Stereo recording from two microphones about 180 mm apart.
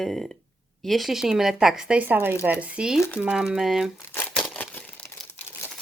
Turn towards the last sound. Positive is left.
turn(degrees=10)  # may be behind; listen again after turning